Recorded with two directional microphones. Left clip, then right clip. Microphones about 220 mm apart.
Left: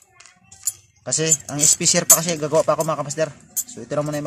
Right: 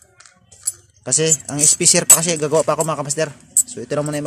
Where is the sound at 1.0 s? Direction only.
25° right (ahead or behind).